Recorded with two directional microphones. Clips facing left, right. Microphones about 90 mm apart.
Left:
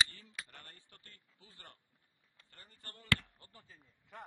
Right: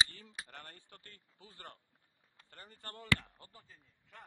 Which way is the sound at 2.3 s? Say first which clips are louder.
Right 6 dB; 60° right (ahead or behind).